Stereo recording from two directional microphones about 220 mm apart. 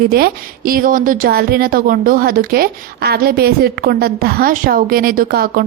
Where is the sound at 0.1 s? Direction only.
45° right (ahead or behind).